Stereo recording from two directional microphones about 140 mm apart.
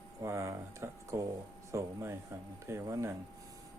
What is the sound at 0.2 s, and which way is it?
Speech, 20° right (ahead or behind).